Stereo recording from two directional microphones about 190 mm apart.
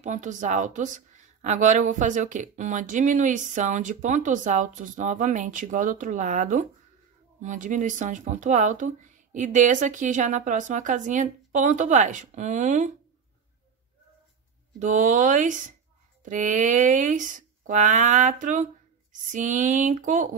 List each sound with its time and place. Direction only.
0.0 s speech: 40° right (ahead or behind)
14.8 s speech: 40° right (ahead or behind)